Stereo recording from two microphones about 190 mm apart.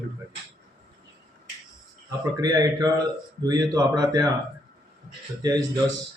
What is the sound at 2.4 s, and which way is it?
Speech, 20° right (ahead or behind).